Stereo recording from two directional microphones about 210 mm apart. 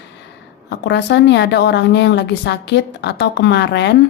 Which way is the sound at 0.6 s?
55° left (ahead or behind).